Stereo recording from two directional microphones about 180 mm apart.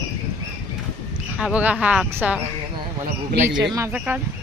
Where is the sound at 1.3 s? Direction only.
5° right (ahead or behind).